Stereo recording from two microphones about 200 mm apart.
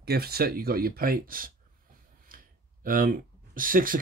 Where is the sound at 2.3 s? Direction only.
45° right (ahead or behind).